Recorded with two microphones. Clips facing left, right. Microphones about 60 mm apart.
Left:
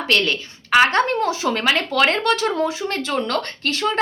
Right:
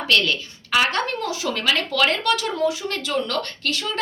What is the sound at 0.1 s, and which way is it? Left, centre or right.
Speech, left.